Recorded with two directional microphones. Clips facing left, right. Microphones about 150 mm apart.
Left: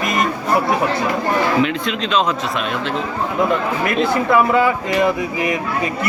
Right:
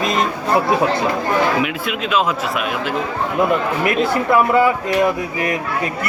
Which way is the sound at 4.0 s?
5° right (ahead or behind).